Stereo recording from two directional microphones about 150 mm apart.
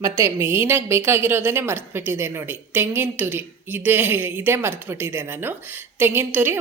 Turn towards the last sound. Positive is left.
turn(degrees=-15)  # may be behind; listen again after turning